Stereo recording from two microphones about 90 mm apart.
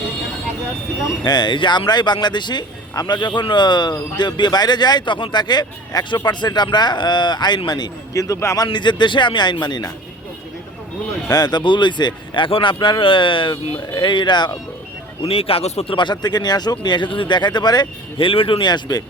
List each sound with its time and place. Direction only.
1.2 s speech: 55° left (ahead or behind); by 8.6 s 35° left (ahead or behind)
8.6 s speech: 60° left (ahead or behind)
11.3 s speech: 50° left (ahead or behind)
15.2 s speech: 90° left; by 17.8 s 50° left (ahead or behind)
18.2 s speech: 80° left
18.6 s speech: 50° left (ahead or behind)